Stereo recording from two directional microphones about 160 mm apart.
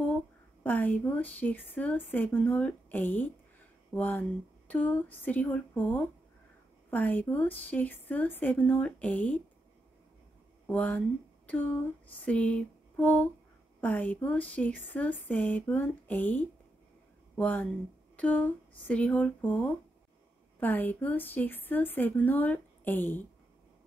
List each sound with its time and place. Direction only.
0.7 s speech: 10° left (ahead or behind)
10.7 s speech: 10° left (ahead or behind)